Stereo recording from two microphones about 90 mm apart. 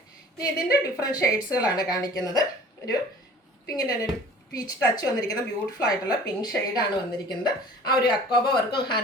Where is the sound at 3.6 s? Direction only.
45° left (ahead or behind); by 9.0 s 60° left (ahead or behind).